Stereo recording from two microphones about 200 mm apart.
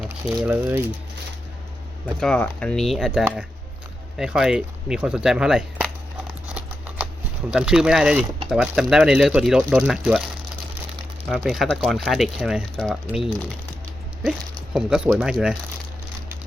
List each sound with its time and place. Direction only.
0.0 s speech: 10° right (ahead or behind)
2.2 s speech: 5° left (ahead or behind)
6.5 s typing: 5° right (ahead or behind)
7.5 s speech: 5° right (ahead or behind)
11.3 s speech: centre (ahead or behind)